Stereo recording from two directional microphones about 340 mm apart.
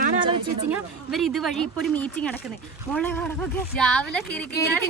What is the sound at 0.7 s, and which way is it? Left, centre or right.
A woman's voice, centre.